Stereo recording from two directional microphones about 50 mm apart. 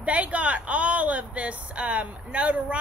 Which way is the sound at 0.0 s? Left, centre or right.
Right.